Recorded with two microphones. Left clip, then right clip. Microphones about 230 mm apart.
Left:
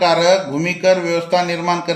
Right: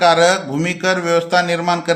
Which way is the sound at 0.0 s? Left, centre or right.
Right.